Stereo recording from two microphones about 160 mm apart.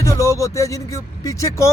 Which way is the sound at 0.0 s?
20° left (ahead or behind).